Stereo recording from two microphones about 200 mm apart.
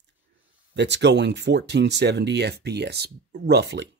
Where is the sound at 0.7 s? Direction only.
60° right (ahead or behind).